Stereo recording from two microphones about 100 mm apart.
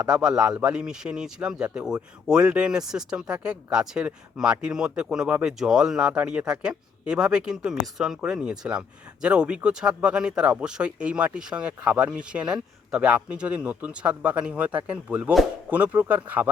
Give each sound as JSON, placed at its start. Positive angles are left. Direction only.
{"t": 0.0, "sound": "speech", "side_deg": -5}